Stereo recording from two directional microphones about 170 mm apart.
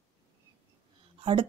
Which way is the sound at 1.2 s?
30° right (ahead or behind).